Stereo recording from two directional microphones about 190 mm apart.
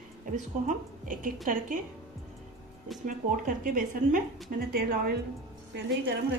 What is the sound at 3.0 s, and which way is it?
A woman's voice, 45° right (ahead or behind).